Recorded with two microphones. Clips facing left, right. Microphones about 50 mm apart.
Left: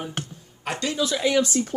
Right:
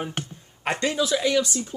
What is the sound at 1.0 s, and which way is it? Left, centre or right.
Speech, centre.